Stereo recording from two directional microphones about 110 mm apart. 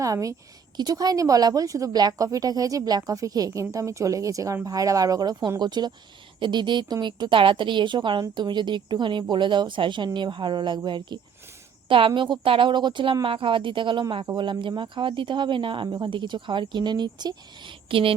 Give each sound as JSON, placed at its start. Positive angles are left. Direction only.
{"t": 0.0, "sound": "a woman's voice", "side_deg": -30}